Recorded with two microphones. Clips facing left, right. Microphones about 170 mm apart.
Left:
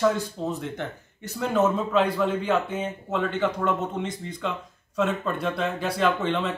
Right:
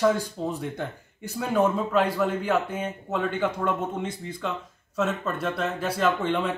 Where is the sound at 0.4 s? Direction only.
15° right (ahead or behind).